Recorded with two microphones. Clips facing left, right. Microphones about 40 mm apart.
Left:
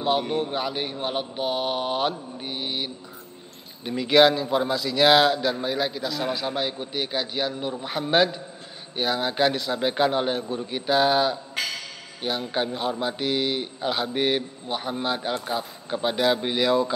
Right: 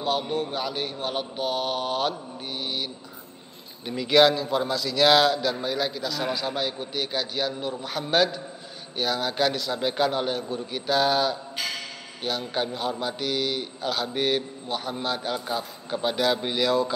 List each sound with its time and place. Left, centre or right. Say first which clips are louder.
0.5 s a man's voice: left 2 dB; centre